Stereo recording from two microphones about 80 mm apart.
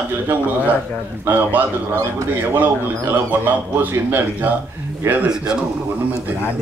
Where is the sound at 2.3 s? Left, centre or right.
Right.